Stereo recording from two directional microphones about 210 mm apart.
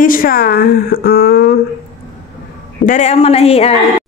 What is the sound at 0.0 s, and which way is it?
A woman's voice, 40° left (ahead or behind).